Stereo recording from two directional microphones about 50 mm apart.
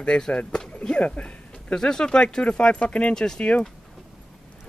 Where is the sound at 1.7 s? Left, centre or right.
Centre.